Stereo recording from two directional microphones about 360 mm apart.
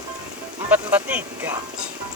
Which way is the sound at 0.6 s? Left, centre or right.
Centre.